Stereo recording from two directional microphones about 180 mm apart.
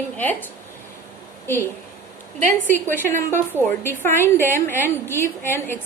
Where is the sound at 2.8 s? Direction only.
10° left (ahead or behind).